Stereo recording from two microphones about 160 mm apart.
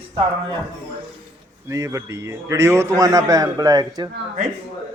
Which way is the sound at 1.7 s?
20° right (ahead or behind).